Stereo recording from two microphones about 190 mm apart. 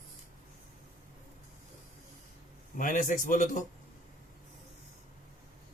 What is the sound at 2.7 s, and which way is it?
Speech, 45° left (ahead or behind).